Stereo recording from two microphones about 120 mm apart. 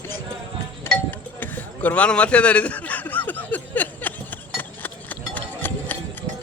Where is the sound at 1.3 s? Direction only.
15° left (ahead or behind).